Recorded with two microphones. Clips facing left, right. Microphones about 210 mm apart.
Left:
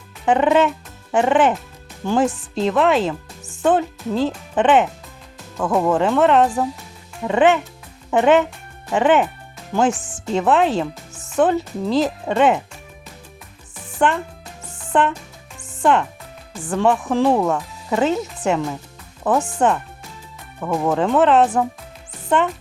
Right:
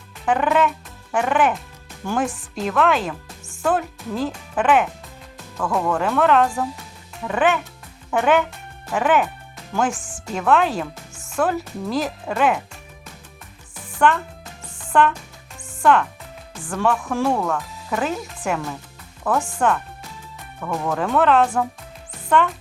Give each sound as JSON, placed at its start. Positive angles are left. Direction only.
{"t": 0.3, "sound": "speech", "side_deg": 25}
{"t": 9.9, "sound": "speech", "side_deg": 5}
{"t": 10.3, "sound": "speech", "side_deg": 25}
{"t": 14.0, "sound": "speech", "side_deg": 20}
{"t": 20.8, "sound": "speech", "side_deg": 25}